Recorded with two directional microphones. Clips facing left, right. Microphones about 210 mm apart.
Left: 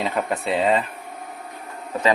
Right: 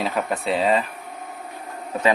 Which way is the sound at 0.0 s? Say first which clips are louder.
Even; centre (ahead or behind).